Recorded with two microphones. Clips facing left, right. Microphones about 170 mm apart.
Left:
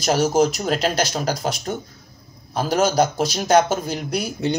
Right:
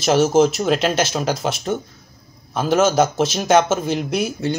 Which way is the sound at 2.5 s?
35° left (ahead or behind).